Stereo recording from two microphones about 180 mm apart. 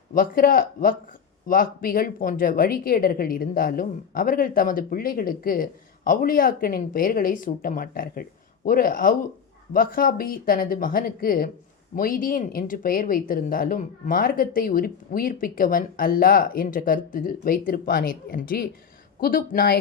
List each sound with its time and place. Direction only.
0.1 s speech: 50° left (ahead or behind)